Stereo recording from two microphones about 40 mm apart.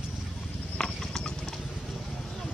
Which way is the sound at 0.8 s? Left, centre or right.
Centre.